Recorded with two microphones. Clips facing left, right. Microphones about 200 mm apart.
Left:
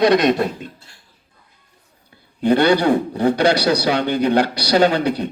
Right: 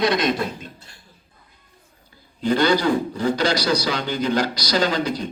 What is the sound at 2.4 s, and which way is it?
A man's voice, 60° left (ahead or behind).